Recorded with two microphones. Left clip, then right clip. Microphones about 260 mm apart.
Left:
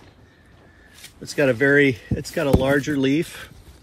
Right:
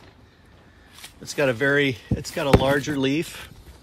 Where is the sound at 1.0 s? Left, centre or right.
Centre.